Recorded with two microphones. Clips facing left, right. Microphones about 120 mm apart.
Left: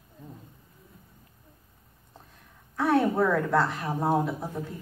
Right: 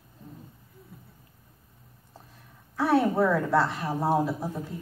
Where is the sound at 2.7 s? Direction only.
Centre (ahead or behind).